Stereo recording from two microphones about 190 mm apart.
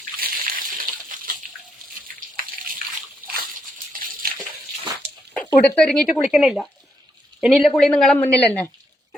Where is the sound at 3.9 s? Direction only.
45° right (ahead or behind).